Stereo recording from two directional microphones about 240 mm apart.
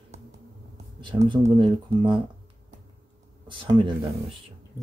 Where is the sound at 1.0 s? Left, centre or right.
Right.